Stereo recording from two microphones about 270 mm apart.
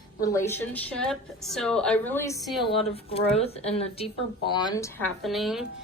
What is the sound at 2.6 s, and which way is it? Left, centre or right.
A woman's voice, left.